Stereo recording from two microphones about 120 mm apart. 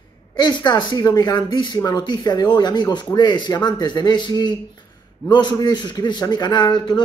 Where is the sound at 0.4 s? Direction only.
40° left (ahead or behind).